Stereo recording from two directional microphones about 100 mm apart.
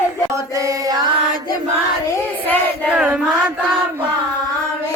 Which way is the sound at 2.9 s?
10° right (ahead or behind).